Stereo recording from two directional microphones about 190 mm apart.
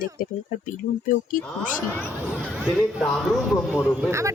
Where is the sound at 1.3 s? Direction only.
45° left (ahead or behind).